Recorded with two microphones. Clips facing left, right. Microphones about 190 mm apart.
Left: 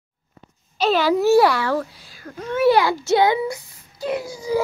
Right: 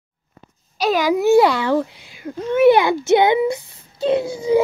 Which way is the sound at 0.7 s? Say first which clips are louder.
Even; 10° right (ahead or behind).